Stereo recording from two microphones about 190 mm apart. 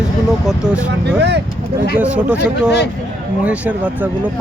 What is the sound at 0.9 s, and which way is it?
Speech, 65° right (ahead or behind).